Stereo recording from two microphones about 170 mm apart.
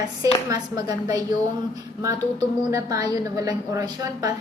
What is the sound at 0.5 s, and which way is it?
A woman's voice, 20° right (ahead or behind).